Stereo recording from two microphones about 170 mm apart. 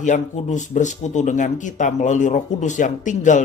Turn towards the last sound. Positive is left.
turn(degrees=45)  # may be behind; listen again after turning